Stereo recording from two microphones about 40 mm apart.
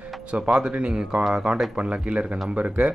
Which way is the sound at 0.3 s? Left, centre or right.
Right.